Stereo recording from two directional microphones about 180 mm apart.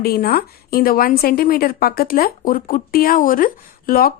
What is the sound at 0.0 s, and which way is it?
Speech, 55° left (ahead or behind).